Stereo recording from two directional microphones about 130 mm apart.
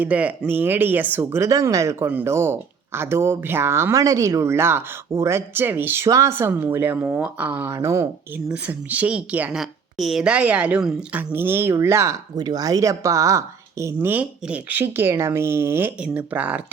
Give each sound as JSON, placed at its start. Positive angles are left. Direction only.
{"t": 0.0, "sound": "speech", "side_deg": -10}
{"t": 8.4, "sound": "speech", "side_deg": -10}